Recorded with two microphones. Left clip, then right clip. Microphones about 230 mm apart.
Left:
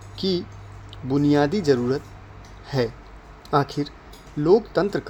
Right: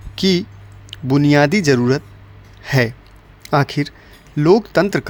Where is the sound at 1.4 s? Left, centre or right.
Right.